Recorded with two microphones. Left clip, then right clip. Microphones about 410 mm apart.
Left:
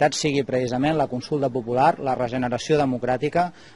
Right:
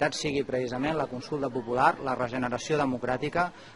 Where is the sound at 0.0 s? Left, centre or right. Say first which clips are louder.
Left 7 dB; left.